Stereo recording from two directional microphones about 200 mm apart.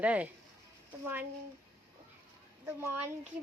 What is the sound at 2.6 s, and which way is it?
Speech, 10° right (ahead or behind).